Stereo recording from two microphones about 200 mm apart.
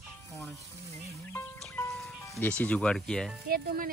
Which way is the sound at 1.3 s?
10° left (ahead or behind).